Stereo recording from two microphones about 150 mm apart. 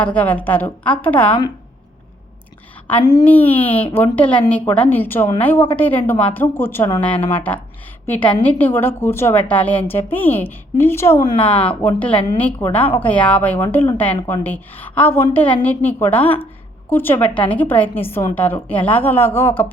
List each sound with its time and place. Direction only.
0.0 s a woman's voice: 10° left (ahead or behind)
3.0 s a woman's voice: 25° left (ahead or behind)
3.2 s a woman's voice: 10° left (ahead or behind)
11.3 s speech: 35° left (ahead or behind)
11.8 s a woman's voice: 10° left (ahead or behind)